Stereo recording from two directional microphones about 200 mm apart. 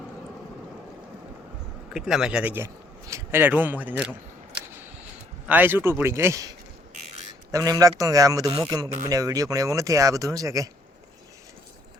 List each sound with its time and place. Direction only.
1.9 s speech: centre (ahead or behind)
5.5 s speech: 10° right (ahead or behind)
7.5 s speech: 15° right (ahead or behind)